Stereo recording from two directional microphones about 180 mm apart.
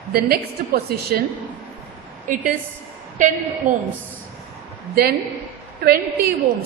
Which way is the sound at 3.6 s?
45° right (ahead or behind).